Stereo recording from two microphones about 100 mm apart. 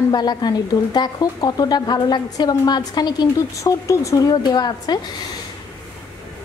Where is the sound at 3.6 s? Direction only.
30° left (ahead or behind).